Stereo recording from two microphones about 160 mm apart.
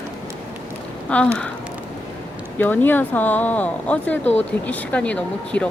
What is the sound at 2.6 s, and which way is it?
Speech, 10° left (ahead or behind).